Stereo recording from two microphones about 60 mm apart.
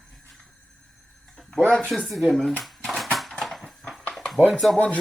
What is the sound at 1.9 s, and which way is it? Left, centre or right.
Speech, centre.